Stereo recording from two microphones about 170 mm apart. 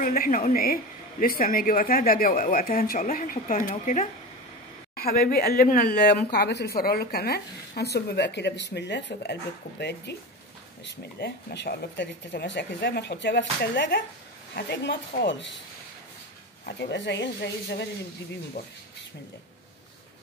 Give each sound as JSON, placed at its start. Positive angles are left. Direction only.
{"t": 0.0, "sound": "speech", "side_deg": 55}
{"t": 5.0, "sound": "a woman's voice", "side_deg": 60}
{"t": 11.1, "sound": "speech", "side_deg": 75}
{"t": 14.5, "sound": "speech", "side_deg": 75}
{"t": 16.6, "sound": "speech", "side_deg": 85}
{"t": 18.6, "sound": "speech", "side_deg": 60}